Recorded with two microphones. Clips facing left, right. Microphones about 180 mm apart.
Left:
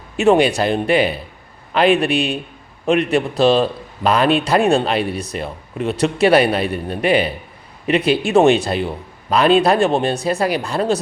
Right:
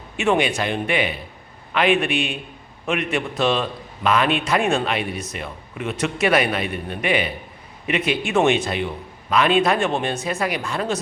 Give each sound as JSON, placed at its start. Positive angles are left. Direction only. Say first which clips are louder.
{"t": 0.2, "sound": "a man's voice", "louder": "left 6 dB", "side_deg": 35}